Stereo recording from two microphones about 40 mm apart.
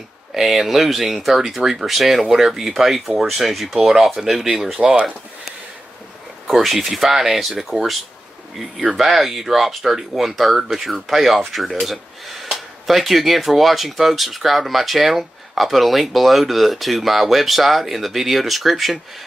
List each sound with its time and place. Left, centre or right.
0.3 s speech: centre
4.7 s speech: right
6.5 s speech: centre